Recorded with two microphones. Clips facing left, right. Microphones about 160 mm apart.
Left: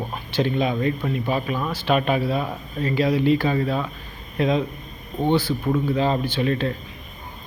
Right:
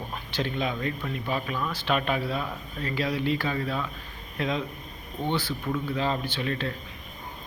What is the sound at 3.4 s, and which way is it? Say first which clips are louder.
Speech: left 7 dB; 30° left (ahead or behind).